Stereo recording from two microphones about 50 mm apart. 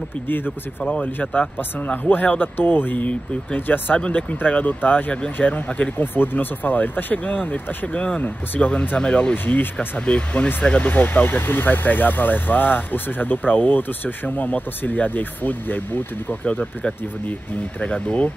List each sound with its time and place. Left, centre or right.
1.0 s speech: left
2.0 s speech: left
4.0 s speech: left
9.0 s speech: left
9.3 s speech: left
10.8 s speech: left